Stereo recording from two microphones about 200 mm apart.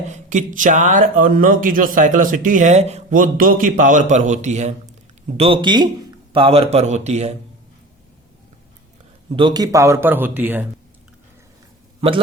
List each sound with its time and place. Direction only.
0.1 s a man's voice: 40° right (ahead or behind)
5.4 s speech: 25° right (ahead or behind)
9.3 s a man's voice: 20° right (ahead or behind)
11.9 s a man's voice: 30° right (ahead or behind)